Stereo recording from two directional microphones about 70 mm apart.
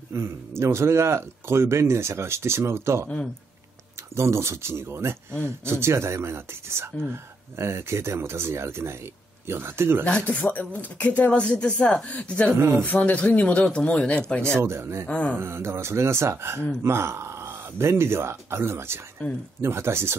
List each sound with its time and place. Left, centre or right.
0.1 s speech: right
4.1 s speech: right
10.0 s speech: centre
12.5 s speech: right
12.8 s speech: centre
14.4 s speech: right
15.0 s speech: centre
15.3 s speech: right